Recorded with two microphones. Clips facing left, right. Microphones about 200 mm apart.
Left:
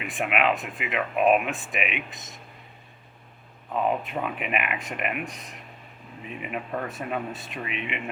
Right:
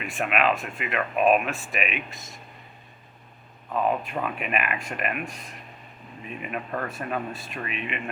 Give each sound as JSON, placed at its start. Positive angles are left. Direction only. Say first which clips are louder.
{"t": 0.0, "sound": "speech", "louder": "even", "side_deg": 15}
{"t": 3.8, "sound": "speech", "louder": "even", "side_deg": 20}
{"t": 6.7, "sound": "speech", "louder": "even", "side_deg": 0}
{"t": 7.4, "sound": "speech", "louder": "even", "side_deg": 20}